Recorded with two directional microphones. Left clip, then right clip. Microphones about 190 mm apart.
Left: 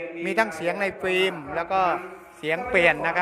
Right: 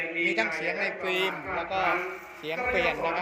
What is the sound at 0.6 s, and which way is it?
Speech, 35° left (ahead or behind).